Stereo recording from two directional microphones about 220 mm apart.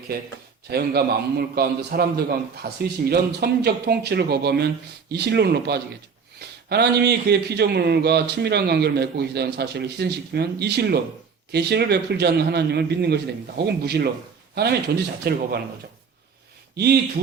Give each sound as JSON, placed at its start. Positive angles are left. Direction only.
{"t": 0.7, "sound": "a man's voice", "side_deg": -45}
{"t": 16.7, "sound": "speech", "side_deg": -45}